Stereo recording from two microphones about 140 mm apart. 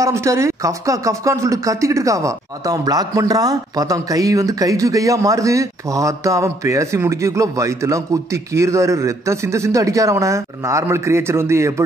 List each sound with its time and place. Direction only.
0.0 s speech: 20° right (ahead or behind)